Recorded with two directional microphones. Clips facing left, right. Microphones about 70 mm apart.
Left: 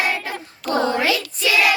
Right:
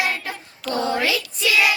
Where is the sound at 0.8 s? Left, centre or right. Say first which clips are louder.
Left 2 dB; left.